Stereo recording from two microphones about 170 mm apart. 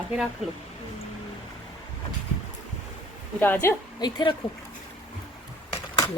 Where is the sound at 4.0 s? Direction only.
25° left (ahead or behind).